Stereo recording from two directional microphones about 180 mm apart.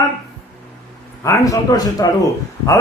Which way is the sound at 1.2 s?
15° left (ahead or behind).